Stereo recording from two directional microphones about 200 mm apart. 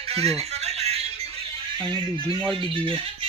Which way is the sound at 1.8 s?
25° right (ahead or behind).